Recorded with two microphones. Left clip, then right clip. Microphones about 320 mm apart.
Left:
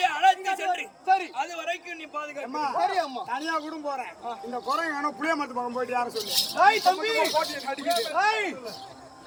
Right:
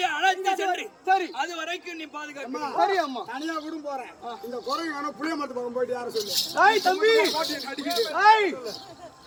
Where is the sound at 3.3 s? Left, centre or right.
Centre.